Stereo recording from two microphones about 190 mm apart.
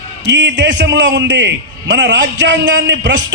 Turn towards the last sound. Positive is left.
turn(degrees=-70)  # may be behind; listen again after turning